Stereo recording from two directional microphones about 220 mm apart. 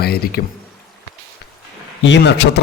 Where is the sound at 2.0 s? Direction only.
55° left (ahead or behind).